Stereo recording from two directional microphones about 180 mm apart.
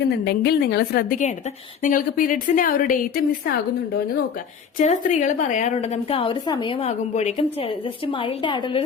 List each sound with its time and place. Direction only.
0.0 s a woman's voice: 60° left (ahead or behind)
4.8 s a woman's voice: 40° left (ahead or behind); by 8.8 s 25° left (ahead or behind)